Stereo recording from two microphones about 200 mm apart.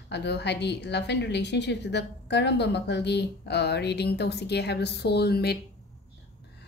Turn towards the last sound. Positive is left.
turn(degrees=55)  # may be behind; listen again after turning